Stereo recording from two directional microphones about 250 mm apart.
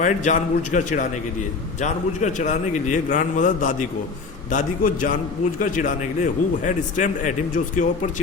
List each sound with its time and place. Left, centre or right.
0.0 s a man's voice: left